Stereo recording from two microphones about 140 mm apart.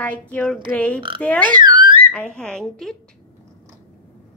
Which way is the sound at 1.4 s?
30° right (ahead or behind).